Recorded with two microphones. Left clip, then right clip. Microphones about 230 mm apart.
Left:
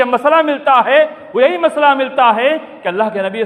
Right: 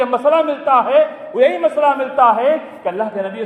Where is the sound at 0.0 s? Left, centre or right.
Left.